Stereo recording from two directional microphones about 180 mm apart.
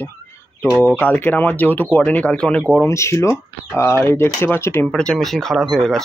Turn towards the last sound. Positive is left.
turn(degrees=0)  # may be behind; listen again after turning